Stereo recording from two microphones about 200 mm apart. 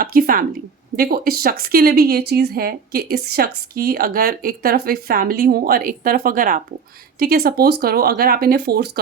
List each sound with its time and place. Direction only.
0.0 s a woman's voice: 45° right (ahead or behind)